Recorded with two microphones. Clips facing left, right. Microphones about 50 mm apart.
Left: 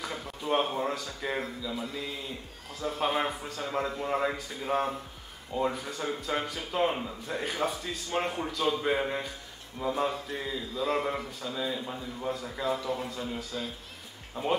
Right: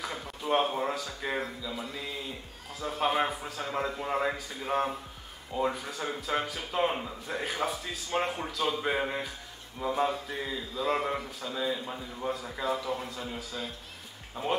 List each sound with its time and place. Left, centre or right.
0.0 s speech: centre